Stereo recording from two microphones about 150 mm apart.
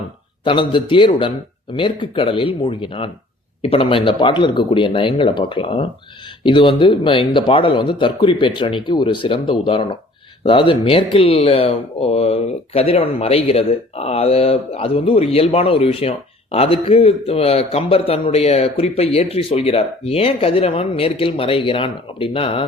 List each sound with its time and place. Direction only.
0.4 s speech: 35° left (ahead or behind)